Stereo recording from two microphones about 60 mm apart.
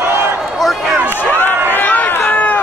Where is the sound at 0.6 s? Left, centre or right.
Centre.